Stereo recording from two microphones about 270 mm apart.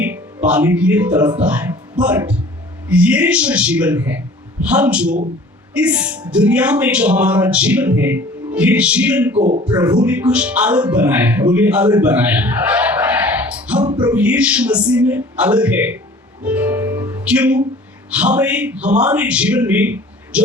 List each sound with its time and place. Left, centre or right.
0.4 s speech: centre
9.4 s speech: right
9.6 s speech: centre
13.8 s music: centre
14.1 s speech: centre
16.4 s music: centre
18.1 s speech: centre